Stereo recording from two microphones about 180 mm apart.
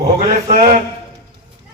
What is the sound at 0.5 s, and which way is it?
Speech, 45° right (ahead or behind).